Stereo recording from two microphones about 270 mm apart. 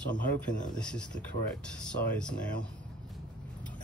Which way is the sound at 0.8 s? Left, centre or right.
Centre.